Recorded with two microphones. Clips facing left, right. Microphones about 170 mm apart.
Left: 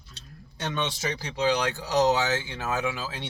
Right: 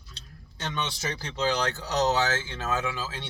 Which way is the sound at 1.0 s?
15° left (ahead or behind).